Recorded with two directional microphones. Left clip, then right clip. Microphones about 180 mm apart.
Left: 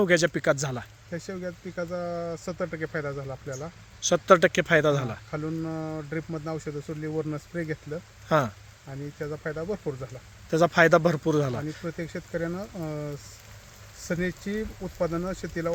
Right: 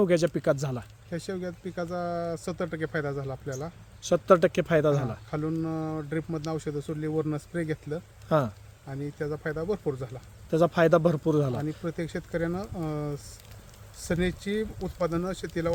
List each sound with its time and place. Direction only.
0.0 s speech: 5° right (ahead or behind)
1.1 s speech: 40° right (ahead or behind)
4.0 s speech: centre (ahead or behind)
5.3 s speech: 30° right (ahead or behind)
8.3 s speech: centre (ahead or behind)
8.9 s speech: 30° right (ahead or behind)
10.5 s speech: centre (ahead or behind)
11.9 s speech: 35° right (ahead or behind)